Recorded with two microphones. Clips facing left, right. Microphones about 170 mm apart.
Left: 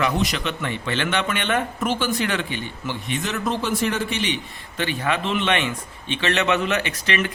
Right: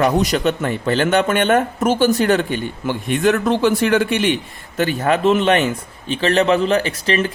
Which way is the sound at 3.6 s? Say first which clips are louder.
Right 8 dB; 65° right (ahead or behind).